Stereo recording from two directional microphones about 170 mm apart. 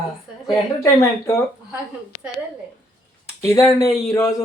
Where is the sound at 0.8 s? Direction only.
15° left (ahead or behind).